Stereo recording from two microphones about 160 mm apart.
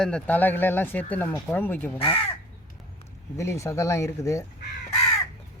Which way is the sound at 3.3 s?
20° left (ahead or behind).